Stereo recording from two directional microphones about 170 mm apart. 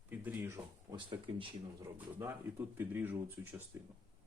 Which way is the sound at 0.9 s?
30° right (ahead or behind).